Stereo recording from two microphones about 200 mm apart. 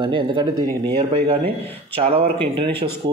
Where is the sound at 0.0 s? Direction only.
25° right (ahead or behind).